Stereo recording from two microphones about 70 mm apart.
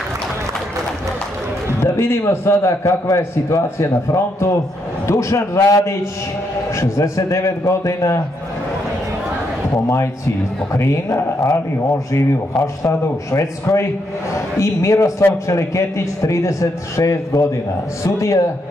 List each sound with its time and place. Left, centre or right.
1.8 s a man's voice: left
9.8 s a man's voice: left
12.5 s a man's voice: left